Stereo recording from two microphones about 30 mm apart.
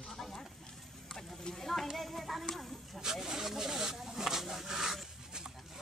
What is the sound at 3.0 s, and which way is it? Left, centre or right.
Speech, centre.